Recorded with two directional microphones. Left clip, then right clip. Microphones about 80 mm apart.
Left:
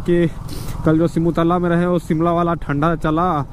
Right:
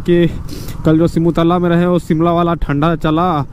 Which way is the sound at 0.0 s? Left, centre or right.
Right.